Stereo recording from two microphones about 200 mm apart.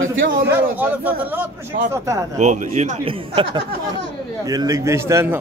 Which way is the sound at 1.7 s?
50° right (ahead or behind).